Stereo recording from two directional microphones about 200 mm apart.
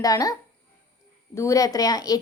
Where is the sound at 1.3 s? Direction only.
15° left (ahead or behind).